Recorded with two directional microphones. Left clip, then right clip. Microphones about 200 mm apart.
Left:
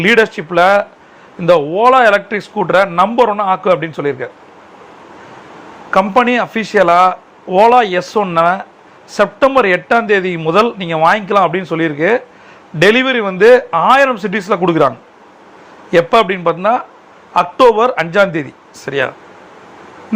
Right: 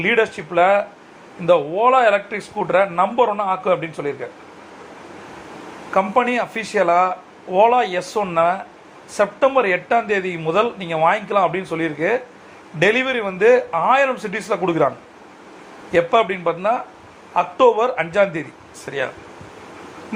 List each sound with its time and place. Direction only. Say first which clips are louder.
0.0 s a man's voice: left 7 dB; 45° left (ahead or behind)
5.9 s a man's voice: left 6 dB; 45° left (ahead or behind)